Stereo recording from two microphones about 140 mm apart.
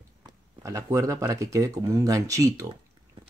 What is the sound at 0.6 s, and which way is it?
Speech, 20° right (ahead or behind).